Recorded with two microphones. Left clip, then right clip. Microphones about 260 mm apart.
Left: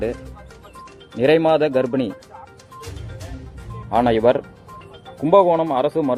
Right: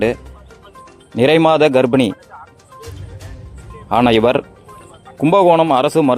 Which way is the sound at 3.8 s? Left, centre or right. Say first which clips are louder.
Right 3 dB; right.